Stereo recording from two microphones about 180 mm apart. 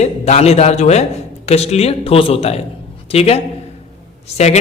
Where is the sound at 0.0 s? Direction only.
35° left (ahead or behind).